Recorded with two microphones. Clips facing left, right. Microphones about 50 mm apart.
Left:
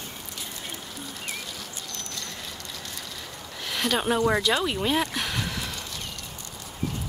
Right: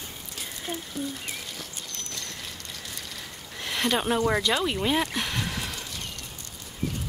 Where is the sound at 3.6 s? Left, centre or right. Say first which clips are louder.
Even; centre.